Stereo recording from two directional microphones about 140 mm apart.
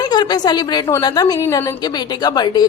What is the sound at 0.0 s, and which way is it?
A woman's voice, 30° left (ahead or behind).